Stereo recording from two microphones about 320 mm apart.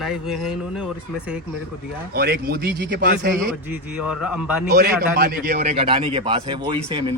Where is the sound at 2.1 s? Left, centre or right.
Right.